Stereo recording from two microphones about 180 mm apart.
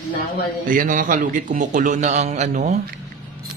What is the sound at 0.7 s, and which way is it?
A man's voice, 45° right (ahead or behind).